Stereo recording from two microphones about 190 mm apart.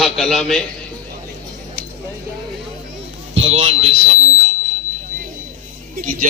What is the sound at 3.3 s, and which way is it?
Speech, 30° right (ahead or behind).